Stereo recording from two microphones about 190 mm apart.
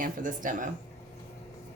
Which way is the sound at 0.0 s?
45° right (ahead or behind).